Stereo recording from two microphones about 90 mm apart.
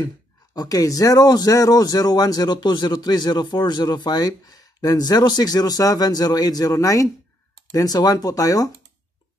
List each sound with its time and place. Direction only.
0.6 s a man's voice: 40° left (ahead or behind)